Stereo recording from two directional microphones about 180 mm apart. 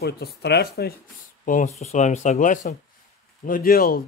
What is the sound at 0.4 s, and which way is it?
Speech, 65° left (ahead or behind).